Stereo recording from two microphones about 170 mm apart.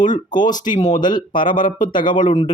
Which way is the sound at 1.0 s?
25° left (ahead or behind).